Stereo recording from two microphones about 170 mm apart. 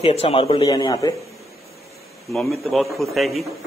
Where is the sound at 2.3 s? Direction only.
Centre (ahead or behind).